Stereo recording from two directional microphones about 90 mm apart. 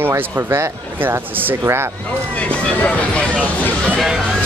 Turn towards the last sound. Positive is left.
turn(degrees=-5)  # may be behind; listen again after turning